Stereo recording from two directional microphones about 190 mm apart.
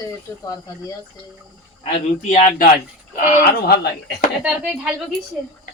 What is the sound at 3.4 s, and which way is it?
Speech, 60° left (ahead or behind).